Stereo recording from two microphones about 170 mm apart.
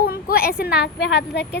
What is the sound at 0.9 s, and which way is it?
Speech, 80° left.